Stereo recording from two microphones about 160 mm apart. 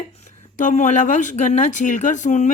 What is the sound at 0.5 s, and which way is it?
Speech, 50° left (ahead or behind).